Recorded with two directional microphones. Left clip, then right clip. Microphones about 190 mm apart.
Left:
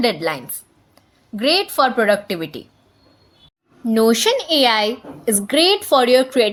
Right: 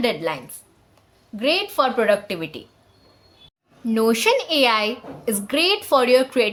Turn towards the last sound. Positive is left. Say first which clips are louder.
# left 3 dB
turn(degrees=15)  # may be behind; listen again after turning